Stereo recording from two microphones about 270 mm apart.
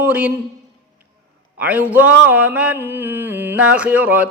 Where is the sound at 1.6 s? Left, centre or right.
Centre.